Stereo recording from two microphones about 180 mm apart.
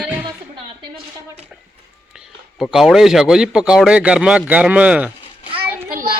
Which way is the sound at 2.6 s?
Centre (ahead or behind).